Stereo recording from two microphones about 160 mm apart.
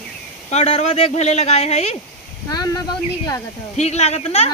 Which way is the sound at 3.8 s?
45° left (ahead or behind).